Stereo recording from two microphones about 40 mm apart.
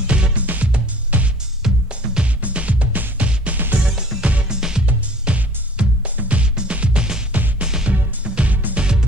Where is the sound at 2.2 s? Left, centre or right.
Right.